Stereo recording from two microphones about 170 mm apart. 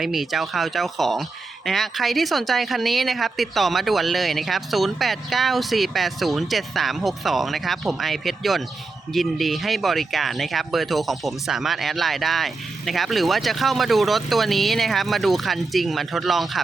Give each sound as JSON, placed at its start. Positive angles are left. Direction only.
{"t": 0.0, "sound": "speech", "side_deg": 0}